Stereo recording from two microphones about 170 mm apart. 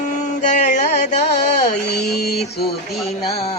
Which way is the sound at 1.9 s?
75° left (ahead or behind).